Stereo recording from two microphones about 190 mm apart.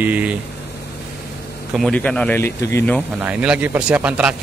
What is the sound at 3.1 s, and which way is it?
Speech, 5° right (ahead or behind).